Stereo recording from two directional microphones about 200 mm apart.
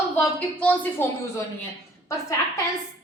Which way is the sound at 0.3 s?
10° left (ahead or behind).